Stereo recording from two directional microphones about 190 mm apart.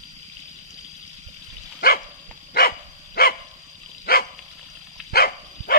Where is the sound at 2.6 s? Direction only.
50° left (ahead or behind).